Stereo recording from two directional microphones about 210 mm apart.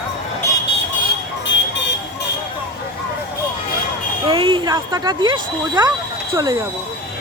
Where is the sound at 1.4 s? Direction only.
60° left (ahead or behind).